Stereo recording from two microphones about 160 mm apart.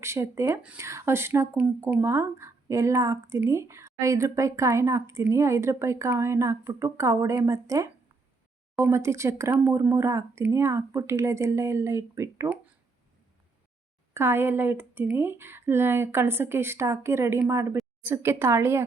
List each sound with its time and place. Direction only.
0.0 s speech: 15° right (ahead or behind)
14.1 s speech: 15° right (ahead or behind)